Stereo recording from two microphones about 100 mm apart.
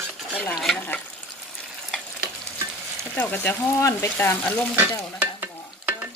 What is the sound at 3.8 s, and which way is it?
Frying, 25° left (ahead or behind).